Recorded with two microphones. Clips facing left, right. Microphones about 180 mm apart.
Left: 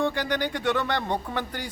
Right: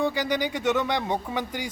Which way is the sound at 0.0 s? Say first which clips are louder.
Right 1 dB; 10° right (ahead or behind).